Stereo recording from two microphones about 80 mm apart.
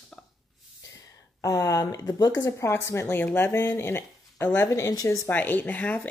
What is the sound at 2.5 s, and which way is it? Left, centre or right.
Speech, left.